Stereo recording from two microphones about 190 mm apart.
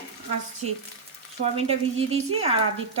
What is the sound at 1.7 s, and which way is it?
Speech, 30° right (ahead or behind).